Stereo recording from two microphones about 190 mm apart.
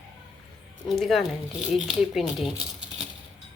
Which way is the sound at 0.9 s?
Centre (ahead or behind).